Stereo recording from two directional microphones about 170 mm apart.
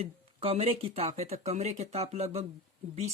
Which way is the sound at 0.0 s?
35° right (ahead or behind).